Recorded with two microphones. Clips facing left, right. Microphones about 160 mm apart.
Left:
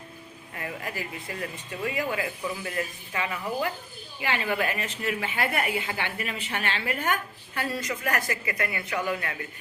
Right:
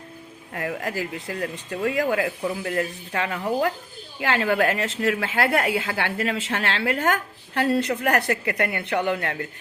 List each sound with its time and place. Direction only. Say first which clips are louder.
0.5 s speech: right 7 dB; 70° right (ahead or behind)
4.2 s a woman's voice: right 6 dB; 90° right; by 9.5 s 60° right (ahead or behind)